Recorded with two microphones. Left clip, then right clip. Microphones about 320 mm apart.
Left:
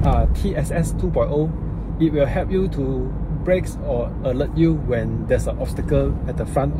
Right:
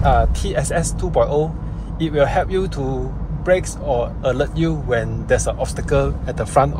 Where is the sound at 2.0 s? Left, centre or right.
Right.